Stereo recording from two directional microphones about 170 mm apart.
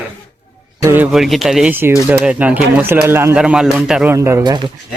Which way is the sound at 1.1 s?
Centre (ahead or behind).